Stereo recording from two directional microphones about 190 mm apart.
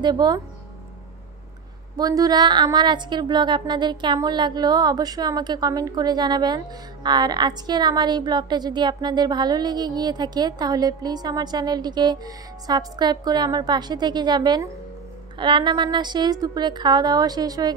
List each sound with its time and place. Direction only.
0.0 s a woman's voice: 20° right (ahead or behind)
2.0 s a woman's voice: 20° right (ahead or behind)